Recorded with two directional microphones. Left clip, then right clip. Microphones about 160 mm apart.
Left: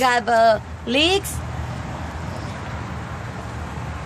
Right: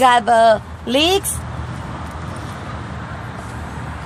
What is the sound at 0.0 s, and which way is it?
Speech, 30° right (ahead or behind).